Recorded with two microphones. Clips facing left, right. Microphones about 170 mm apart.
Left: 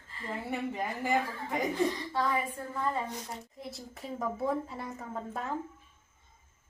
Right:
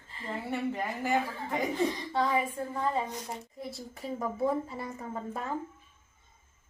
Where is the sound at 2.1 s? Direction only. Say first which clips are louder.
Right 2 dB; 20° right (ahead or behind).